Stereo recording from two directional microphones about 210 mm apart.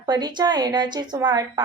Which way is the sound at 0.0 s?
20° right (ahead or behind).